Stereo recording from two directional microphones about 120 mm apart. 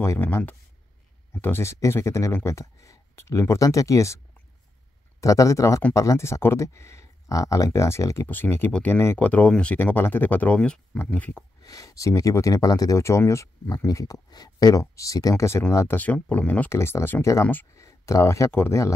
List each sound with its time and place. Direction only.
0.0 s speech: 20° left (ahead or behind)
5.2 s speech: 25° left (ahead or behind)
11.6 s speech: 30° left (ahead or behind)
16.0 s speech: 15° left (ahead or behind)